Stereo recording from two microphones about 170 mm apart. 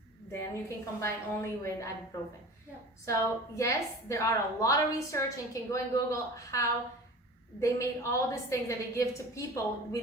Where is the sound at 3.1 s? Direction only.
20° left (ahead or behind).